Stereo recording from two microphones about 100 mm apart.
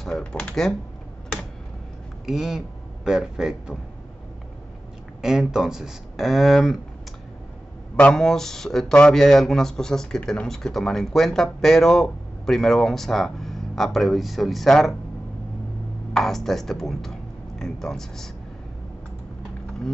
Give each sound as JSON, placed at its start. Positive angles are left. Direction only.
{"t": 0.0, "sound": "typing", "side_deg": 10}
{"t": 2.2, "sound": "speech", "side_deg": -5}
{"t": 5.2, "sound": "speech", "side_deg": -5}
{"t": 7.9, "sound": "speech", "side_deg": 5}
{"t": 16.1, "sound": "speech", "side_deg": 5}